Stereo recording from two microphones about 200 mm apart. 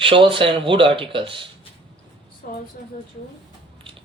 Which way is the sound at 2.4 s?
45° left (ahead or behind).